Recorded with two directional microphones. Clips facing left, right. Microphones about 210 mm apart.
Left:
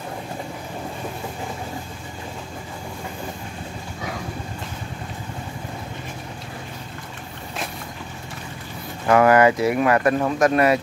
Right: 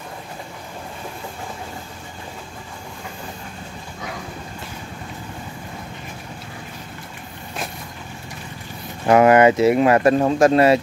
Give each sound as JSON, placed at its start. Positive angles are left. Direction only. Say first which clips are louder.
{"t": 9.0, "sound": "speech", "louder": "right 2 dB", "side_deg": -20}